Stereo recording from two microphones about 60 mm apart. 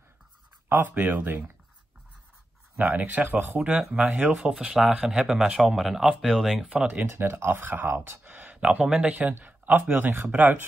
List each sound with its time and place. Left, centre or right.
0.7 s speech: right
2.8 s a man's voice: right; by 6.6 s centre
6.6 s a man's voice: centre
7.0 s speech: right
8.5 s speech: centre